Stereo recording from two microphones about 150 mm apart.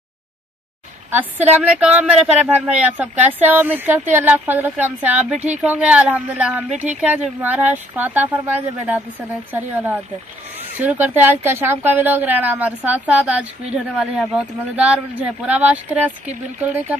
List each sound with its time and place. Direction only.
1.1 s speech: 10° right (ahead or behind)
9.5 s speech: 10° right (ahead or behind)